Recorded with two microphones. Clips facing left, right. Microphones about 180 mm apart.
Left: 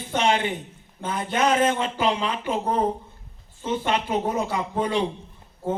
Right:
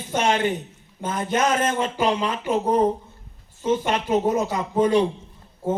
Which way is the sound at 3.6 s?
45° right (ahead or behind).